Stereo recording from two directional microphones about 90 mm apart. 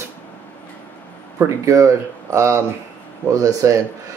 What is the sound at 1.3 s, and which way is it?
Speech, 35° right (ahead or behind).